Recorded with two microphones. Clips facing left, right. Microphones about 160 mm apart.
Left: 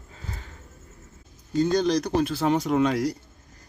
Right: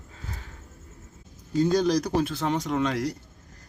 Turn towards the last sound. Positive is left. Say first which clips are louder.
# left 4 dB
turn(degrees=10)  # may be behind; listen again after turning